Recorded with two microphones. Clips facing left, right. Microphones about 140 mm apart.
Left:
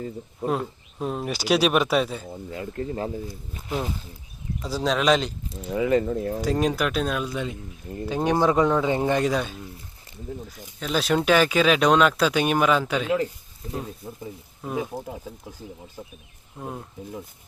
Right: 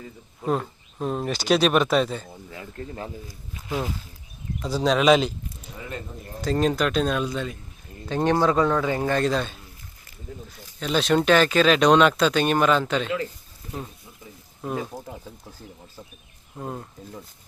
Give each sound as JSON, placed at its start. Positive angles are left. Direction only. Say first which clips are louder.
{"t": 0.4, "sound": "speech", "louder": "right 1 dB", "side_deg": 5}
{"t": 2.3, "sound": "a sound", "louder": "left 6 dB", "side_deg": 20}
{"t": 2.7, "sound": "speech", "louder": "left 6 dB", "side_deg": 30}
{"t": 4.6, "sound": "speech", "louder": "right 3 dB", "side_deg": 0}
{"t": 5.6, "sound": "speech", "louder": "left 16 dB", "side_deg": 90}
{"t": 6.4, "sound": "speech", "louder": "right 3 dB", "side_deg": 10}
{"t": 10.8, "sound": "speech", "louder": "right 2 dB", "side_deg": 5}
{"t": 14.8, "sound": "speech", "louder": "left 3 dB", "side_deg": 10}
{"t": 16.6, "sound": "speech", "louder": "right 1 dB", "side_deg": 0}